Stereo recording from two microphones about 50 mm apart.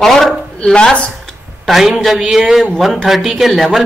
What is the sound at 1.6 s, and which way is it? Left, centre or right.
A man's voice, centre.